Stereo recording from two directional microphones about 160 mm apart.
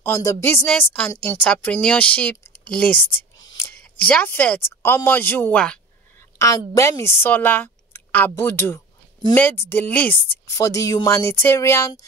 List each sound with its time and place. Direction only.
0.0 s speech: 20° left (ahead or behind)
6.3 s speech: 20° left (ahead or behind)